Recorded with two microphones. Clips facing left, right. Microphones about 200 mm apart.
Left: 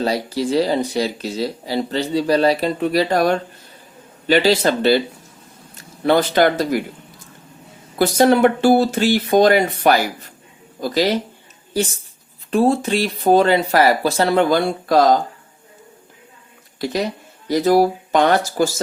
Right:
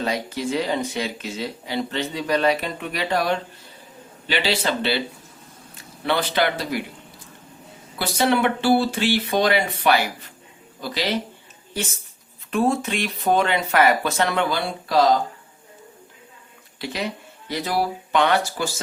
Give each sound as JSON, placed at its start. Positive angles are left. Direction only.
{"t": 0.0, "sound": "speech", "side_deg": 35}
{"t": 7.9, "sound": "speech", "side_deg": 40}
{"t": 12.5, "sound": "speech", "side_deg": 35}
{"t": 14.5, "sound": "speech", "side_deg": 50}
{"t": 16.7, "sound": "speech", "side_deg": 40}